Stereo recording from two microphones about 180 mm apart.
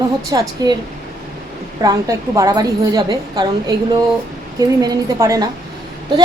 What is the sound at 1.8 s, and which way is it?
A woman's voice, 20° right (ahead or behind).